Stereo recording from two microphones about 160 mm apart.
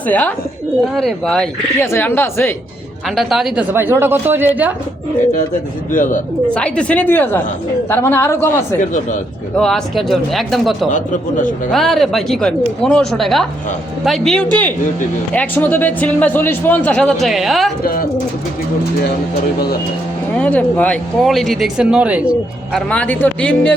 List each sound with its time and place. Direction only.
0.1 s a man's voice: 10° left (ahead or behind)
1.8 s a man's voice: 15° left (ahead or behind)
3.2 s a woman's voice: centre (ahead or behind)
5.9 s speech: 55° left (ahead or behind)
6.5 s a man's voice: 5° left (ahead or behind)
8.8 s a man's voice: 50° left (ahead or behind)
9.6 s speech: 5° left (ahead or behind)
10.9 s a man's voice: 55° left (ahead or behind)
11.7 s a man's voice: centre (ahead or behind)
17.8 s speech: 60° left (ahead or behind)
20.3 s speech: 10° left (ahead or behind); by 22.8 s 5° right (ahead or behind)
22.9 s a man's voice: 10° left (ahead or behind)